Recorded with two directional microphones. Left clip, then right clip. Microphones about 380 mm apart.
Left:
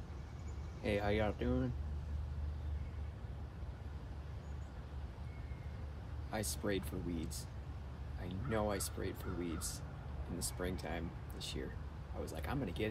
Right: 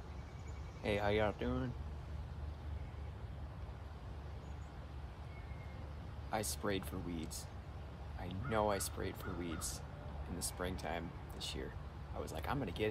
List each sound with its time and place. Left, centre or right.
0.8 s speech: centre
6.3 s speech: centre